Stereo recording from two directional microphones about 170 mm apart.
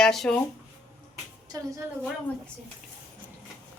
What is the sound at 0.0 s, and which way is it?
Speech, centre (ahead or behind).